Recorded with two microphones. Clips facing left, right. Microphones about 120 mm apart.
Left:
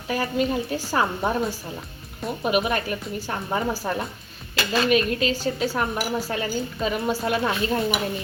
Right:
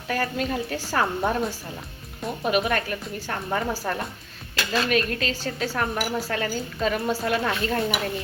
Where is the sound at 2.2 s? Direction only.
5° left (ahead or behind).